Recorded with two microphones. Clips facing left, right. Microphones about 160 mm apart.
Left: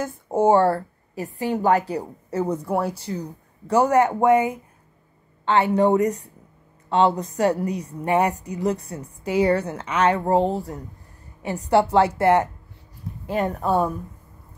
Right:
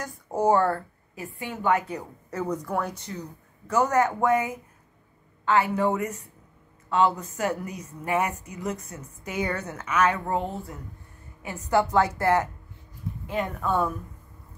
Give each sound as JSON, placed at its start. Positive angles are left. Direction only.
{"t": 0.0, "sound": "speech", "side_deg": 25}